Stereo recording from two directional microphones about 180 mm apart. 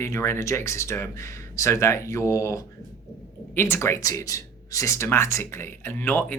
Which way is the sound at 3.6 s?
10° left (ahead or behind).